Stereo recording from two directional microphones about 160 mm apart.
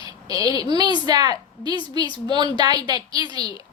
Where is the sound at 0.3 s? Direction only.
25° right (ahead or behind).